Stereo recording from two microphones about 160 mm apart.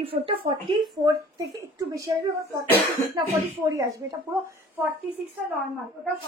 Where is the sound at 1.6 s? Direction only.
20° right (ahead or behind).